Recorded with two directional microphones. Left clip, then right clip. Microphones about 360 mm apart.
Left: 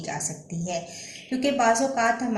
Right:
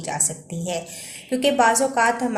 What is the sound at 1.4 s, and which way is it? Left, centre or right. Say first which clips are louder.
Speech: right 4 dB; right.